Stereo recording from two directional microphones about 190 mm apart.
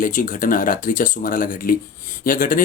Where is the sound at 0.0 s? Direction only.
45° left (ahead or behind).